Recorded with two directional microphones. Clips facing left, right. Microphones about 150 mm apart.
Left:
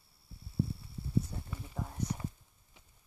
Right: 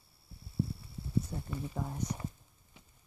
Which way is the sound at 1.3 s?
5° right (ahead or behind).